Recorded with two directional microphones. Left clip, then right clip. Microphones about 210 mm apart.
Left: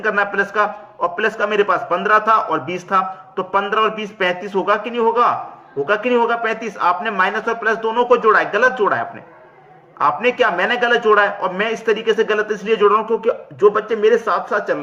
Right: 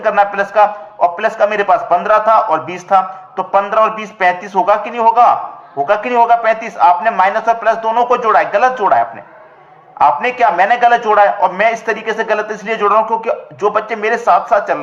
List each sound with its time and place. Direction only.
0.0 s a man's voice: 15° left (ahead or behind)